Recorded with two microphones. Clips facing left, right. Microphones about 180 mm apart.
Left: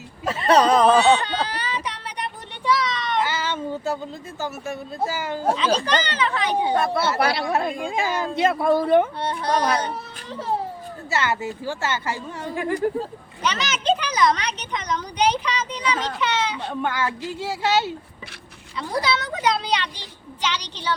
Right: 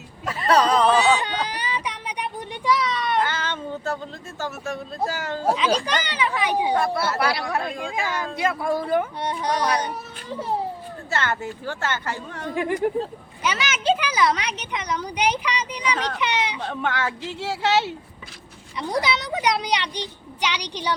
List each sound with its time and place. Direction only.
0.3 s speech: 25° left (ahead or behind)
1.2 s a sound: 15° right (ahead or behind)
3.2 s speech: 5° left (ahead or behind)
5.5 s speech: 10° right (ahead or behind)
6.7 s speech: 25° left (ahead or behind)
9.1 s speech: 15° right (ahead or behind)
11.1 s a woman's voice: 10° left (ahead or behind)
13.4 s speech: 10° right (ahead or behind)
16.0 s a woman's voice: 10° left (ahead or behind)
16.2 s a sound: 15° right (ahead or behind)
16.6 s a woman's voice: centre (ahead or behind)
18.8 s speech: 15° right (ahead or behind)